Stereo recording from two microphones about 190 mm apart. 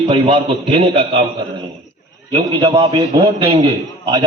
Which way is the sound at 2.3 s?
25° right (ahead or behind).